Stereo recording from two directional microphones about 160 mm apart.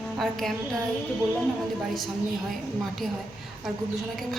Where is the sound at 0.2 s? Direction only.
Centre (ahead or behind).